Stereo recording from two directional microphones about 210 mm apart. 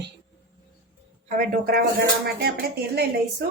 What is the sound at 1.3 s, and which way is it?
Speech, 40° right (ahead or behind).